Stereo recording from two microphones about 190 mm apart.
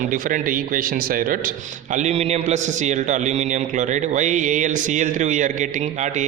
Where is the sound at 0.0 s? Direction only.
45° right (ahead or behind).